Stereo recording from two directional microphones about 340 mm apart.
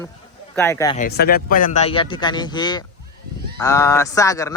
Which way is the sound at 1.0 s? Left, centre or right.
Left.